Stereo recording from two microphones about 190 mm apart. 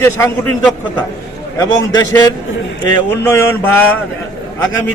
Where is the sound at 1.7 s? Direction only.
20° left (ahead or behind).